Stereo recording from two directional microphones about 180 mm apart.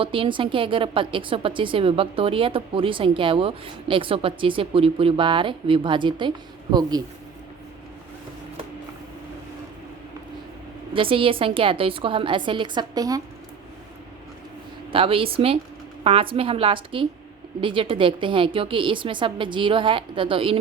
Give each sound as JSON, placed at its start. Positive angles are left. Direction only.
{"t": 0.0, "sound": "a woman's voice", "side_deg": -30}
{"t": 10.9, "sound": "a woman's voice", "side_deg": -30}
{"t": 14.9, "sound": "a woman's voice", "side_deg": -30}